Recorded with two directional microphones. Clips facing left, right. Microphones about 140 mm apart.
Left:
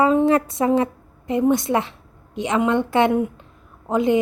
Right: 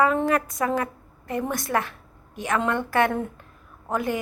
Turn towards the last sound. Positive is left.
turn(degrees=20)  # may be behind; listen again after turning